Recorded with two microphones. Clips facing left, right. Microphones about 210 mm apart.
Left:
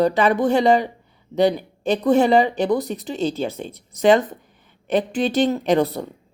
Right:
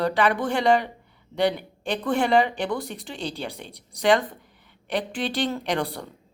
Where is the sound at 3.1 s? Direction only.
45° left (ahead or behind).